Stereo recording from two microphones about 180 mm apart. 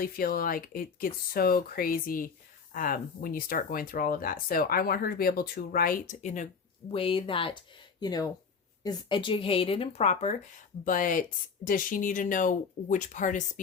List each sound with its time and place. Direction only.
0.0 s speech: 55° left (ahead or behind)
6.9 s speech: 30° left (ahead or behind)
10.8 s speech: 50° left (ahead or behind)